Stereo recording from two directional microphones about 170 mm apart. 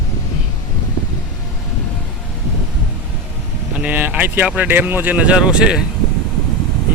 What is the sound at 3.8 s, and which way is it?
Speech, 10° right (ahead or behind).